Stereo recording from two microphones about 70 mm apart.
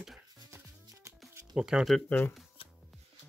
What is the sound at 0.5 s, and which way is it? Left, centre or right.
Music, right.